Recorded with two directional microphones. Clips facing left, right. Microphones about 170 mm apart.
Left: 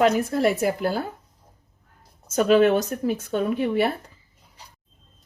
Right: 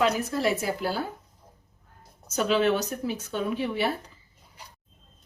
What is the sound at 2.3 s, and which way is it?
Speech, 50° left (ahead or behind).